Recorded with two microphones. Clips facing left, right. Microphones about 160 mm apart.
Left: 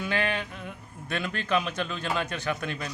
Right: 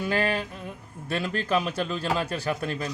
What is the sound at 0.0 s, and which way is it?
Speech, 40° right (ahead or behind).